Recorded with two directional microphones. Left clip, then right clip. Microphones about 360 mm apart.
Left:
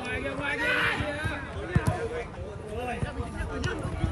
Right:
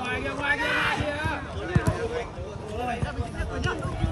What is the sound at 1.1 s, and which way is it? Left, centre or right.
Basketball bounce, centre.